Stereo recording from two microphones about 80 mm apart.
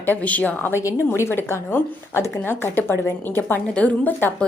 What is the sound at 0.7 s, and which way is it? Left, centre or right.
A woman's voice, left.